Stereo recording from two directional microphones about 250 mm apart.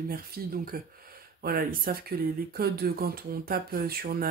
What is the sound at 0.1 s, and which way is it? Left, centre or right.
Speech, right.